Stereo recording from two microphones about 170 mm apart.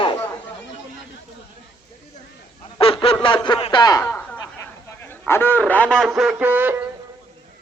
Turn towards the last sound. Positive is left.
turn(degrees=-10)  # may be behind; listen again after turning